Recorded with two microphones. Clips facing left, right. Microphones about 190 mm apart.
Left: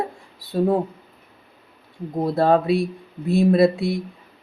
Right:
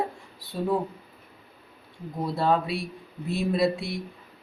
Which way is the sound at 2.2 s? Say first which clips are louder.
Left 7 dB; 50° left (ahead or behind).